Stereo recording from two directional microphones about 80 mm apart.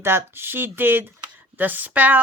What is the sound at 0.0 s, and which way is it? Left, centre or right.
Speech, right.